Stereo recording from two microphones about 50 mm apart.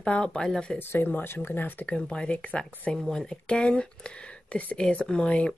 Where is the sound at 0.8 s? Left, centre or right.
Left.